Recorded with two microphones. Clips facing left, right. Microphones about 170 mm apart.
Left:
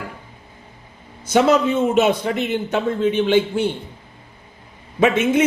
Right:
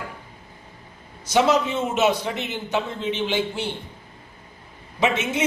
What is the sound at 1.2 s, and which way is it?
A man's voice, 55° left (ahead or behind).